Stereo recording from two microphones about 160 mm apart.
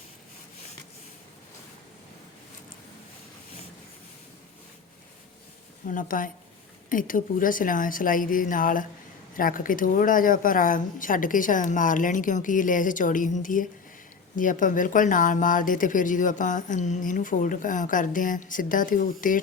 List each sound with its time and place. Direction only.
5.8 s speech: 55° left (ahead or behind)